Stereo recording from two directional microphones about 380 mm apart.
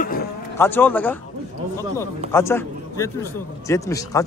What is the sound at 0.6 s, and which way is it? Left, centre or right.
A man's voice, centre.